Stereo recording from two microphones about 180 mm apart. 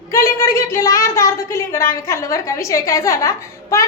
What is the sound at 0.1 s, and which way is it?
A woman's voice, 15° left (ahead or behind).